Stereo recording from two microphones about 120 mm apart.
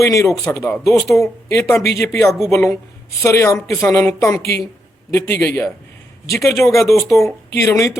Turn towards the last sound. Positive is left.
turn(degrees=25)  # may be behind; listen again after turning